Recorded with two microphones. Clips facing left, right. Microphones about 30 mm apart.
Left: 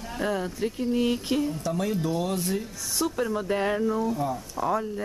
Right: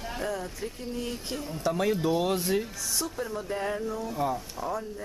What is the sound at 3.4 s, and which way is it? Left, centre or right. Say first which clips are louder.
Speech: left 4 dB; left.